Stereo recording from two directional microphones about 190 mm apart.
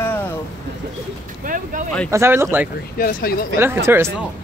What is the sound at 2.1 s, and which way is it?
Speech, 15° right (ahead or behind).